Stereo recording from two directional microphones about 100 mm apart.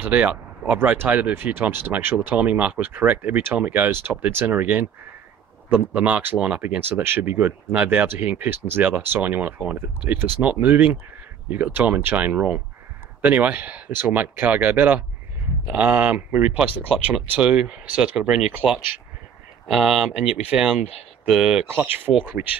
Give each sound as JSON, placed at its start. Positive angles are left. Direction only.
{"t": 0.0, "sound": "speech", "side_deg": -15}
{"t": 19.7, "sound": "speech", "side_deg": -5}
{"t": 21.8, "sound": "speech", "side_deg": -20}